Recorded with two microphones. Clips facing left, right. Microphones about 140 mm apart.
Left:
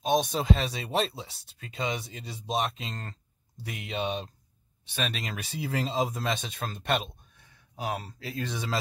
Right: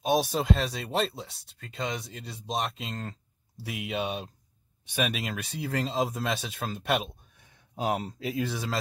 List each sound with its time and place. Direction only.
0.0 s speech: 5° right (ahead or behind)
7.7 s speech: 20° right (ahead or behind)